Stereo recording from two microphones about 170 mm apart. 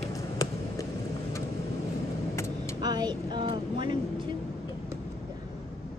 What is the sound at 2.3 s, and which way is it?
Vehicle, 15° left (ahead or behind).